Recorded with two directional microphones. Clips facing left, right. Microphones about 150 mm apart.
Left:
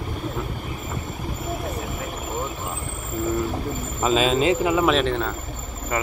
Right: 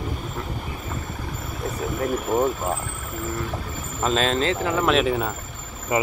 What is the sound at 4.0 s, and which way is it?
Speech, 5° left (ahead or behind).